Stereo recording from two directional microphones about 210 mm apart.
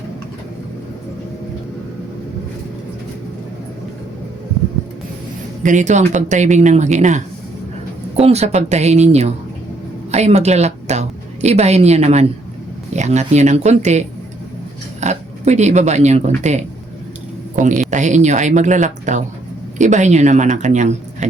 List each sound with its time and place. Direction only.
5.6 s a woman's voice: 35° right (ahead or behind)
15.0 s speech: 35° right (ahead or behind)
17.9 s speech: 35° right (ahead or behind)